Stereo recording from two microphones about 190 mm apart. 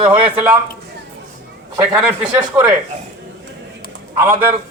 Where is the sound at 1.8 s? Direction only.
5° right (ahead or behind).